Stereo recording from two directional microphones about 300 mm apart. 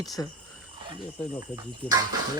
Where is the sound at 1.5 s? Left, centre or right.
Centre.